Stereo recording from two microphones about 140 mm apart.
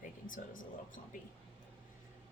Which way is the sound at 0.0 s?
70° left (ahead or behind).